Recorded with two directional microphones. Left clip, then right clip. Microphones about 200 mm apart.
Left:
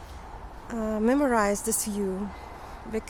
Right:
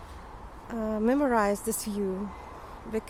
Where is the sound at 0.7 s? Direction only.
Centre (ahead or behind).